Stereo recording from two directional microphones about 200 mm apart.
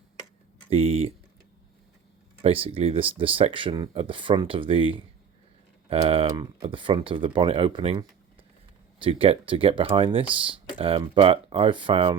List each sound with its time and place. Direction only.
0.7 s speech: 30° right (ahead or behind)
2.4 s speech: 30° right (ahead or behind)